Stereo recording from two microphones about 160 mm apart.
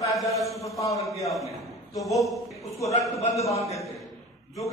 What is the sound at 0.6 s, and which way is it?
Speech, 20° left (ahead or behind).